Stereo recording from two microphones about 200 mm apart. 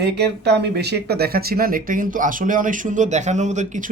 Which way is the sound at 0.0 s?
55° right (ahead or behind).